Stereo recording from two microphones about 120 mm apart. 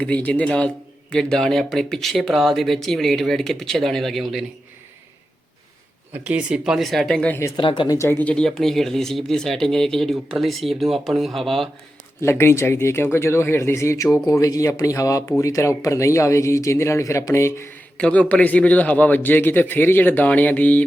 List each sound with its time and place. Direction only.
0.0 s speech: 10° left (ahead or behind)
6.2 s speech: 10° right (ahead or behind)
7.7 s speech: 30° left (ahead or behind); by 11.7 s centre (ahead or behind)
12.2 s speech: 20° left (ahead or behind)
17.9 s speech: 10° left (ahead or behind)